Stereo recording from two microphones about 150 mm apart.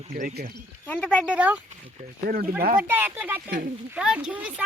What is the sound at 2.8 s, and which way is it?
Speech, 15° right (ahead or behind).